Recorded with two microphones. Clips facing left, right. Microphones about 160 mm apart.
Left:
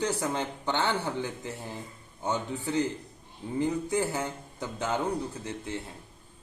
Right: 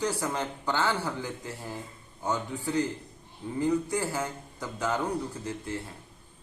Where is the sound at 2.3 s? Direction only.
25° left (ahead or behind).